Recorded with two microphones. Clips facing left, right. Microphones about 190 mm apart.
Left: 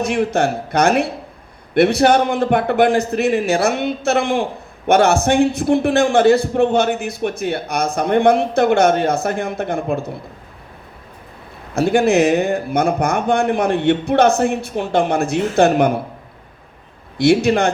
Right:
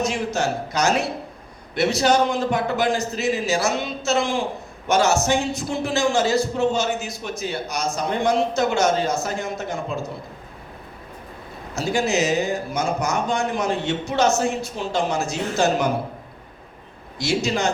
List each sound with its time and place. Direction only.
0.0 s a man's voice: 60° left (ahead or behind)
11.7 s a man's voice: 60° left (ahead or behind)
17.2 s a man's voice: 60° left (ahead or behind)